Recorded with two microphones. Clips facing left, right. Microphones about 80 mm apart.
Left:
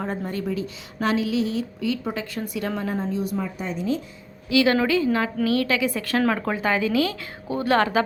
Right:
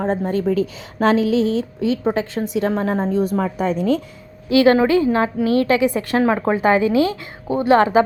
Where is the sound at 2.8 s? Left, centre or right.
Right.